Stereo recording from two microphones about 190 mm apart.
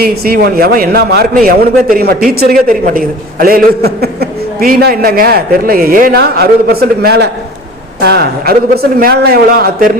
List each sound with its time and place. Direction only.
0.0 s a man's voice: 55° right (ahead or behind)